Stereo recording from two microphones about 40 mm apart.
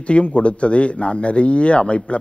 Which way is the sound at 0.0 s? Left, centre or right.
Left.